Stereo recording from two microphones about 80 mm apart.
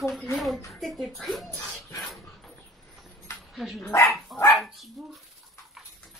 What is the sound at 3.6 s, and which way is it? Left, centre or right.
Speech, centre.